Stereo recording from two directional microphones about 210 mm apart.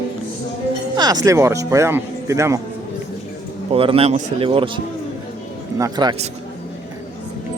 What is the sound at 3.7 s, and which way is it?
Speech, 25° right (ahead or behind).